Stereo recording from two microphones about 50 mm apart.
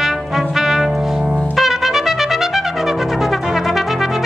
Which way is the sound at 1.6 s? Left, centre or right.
Centre.